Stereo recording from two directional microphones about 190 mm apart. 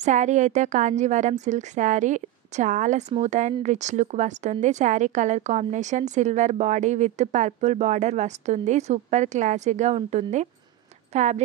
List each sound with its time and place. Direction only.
0.0 s a woman's voice: 40° right (ahead or behind)